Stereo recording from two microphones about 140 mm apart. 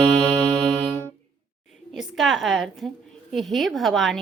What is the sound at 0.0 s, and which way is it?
Music, 15° right (ahead or behind).